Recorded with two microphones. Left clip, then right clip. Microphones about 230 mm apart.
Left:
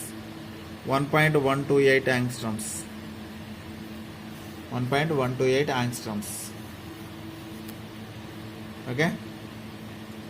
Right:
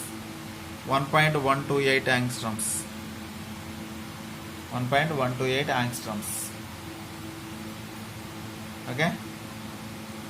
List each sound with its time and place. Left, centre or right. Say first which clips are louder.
0.9 s speech: even; left
4.9 s speech: right 1 dB; left